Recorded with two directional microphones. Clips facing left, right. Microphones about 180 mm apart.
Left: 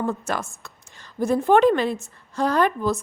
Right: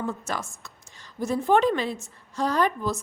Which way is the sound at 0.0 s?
60° left (ahead or behind).